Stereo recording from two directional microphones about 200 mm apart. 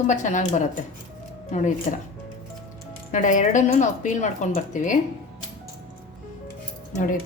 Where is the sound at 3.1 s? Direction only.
40° left (ahead or behind).